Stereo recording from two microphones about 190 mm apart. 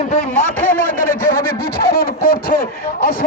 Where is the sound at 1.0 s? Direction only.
50° left (ahead or behind).